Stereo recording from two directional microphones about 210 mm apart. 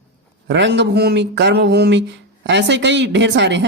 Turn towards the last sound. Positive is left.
turn(degrees=-55)  # may be behind; listen again after turning